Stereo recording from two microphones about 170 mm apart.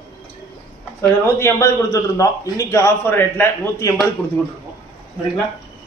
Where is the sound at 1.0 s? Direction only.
15° left (ahead or behind).